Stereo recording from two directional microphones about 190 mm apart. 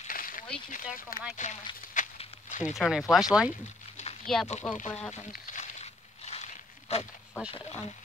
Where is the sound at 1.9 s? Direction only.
45° left (ahead or behind).